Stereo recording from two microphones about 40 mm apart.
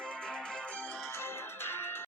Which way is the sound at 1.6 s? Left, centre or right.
Left.